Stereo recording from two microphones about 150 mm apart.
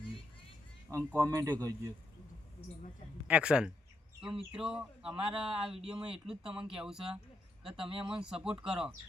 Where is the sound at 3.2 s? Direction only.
5° right (ahead or behind).